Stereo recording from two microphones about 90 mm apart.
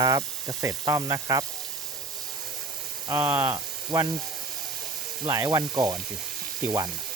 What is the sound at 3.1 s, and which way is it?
Speech, 25° right (ahead or behind).